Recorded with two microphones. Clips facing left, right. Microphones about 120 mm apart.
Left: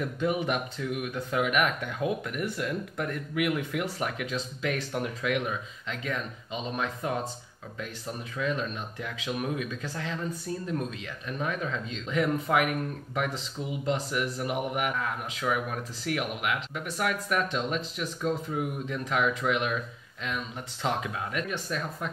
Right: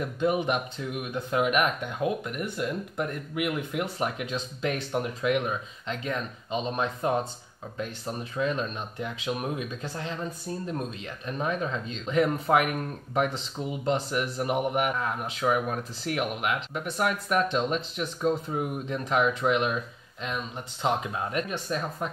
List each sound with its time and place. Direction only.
0.2 s speech: 20° right (ahead or behind)
8.4 s speech: 25° right (ahead or behind)
11.2 s speech: 30° right (ahead or behind)
20.8 s speech: 25° right (ahead or behind)